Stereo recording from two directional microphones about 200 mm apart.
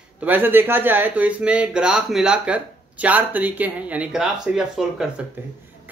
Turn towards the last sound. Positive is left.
turn(degrees=-5)  # may be behind; listen again after turning